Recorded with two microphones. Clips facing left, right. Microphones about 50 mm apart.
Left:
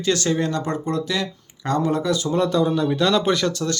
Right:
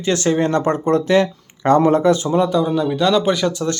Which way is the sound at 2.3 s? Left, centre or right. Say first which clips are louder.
Right 3 dB; centre.